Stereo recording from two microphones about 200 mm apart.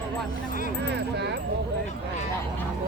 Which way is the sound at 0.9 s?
55° right (ahead or behind).